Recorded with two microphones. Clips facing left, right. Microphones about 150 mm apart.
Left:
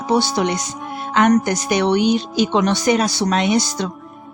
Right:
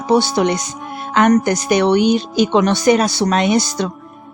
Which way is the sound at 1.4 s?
55° right (ahead or behind).